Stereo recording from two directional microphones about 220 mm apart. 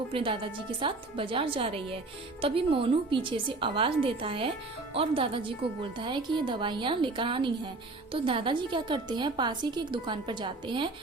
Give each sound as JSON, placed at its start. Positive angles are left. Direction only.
{"t": 0.1, "sound": "a woman's voice", "side_deg": -25}